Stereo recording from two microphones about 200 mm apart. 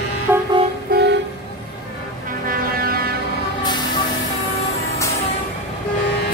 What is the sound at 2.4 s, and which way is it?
Music, 45° right (ahead or behind).